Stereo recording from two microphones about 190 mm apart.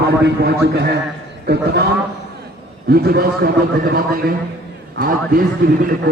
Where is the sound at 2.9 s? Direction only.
55° right (ahead or behind).